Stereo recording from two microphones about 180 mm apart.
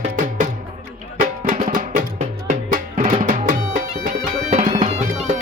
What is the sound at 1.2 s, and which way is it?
Music, 45° right (ahead or behind).